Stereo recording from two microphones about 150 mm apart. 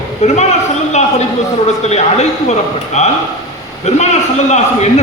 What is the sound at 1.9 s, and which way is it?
A man's voice, 50° left (ahead or behind).